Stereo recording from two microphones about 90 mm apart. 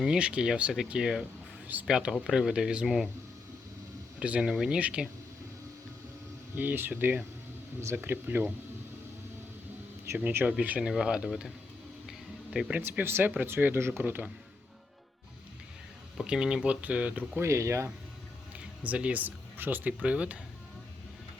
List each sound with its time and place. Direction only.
0.0 s speech: 10° right (ahead or behind)
4.2 s speech: 10° right (ahead or behind)
6.6 s speech: 20° right (ahead or behind)
10.1 s speech: 25° right (ahead or behind)
12.5 s speech: 10° right (ahead or behind)
12.8 s speech: 25° right (ahead or behind)
16.1 s speech: 10° right (ahead or behind)
17.4 s speech: 35° right (ahead or behind)
18.8 s speech: 15° right (ahead or behind)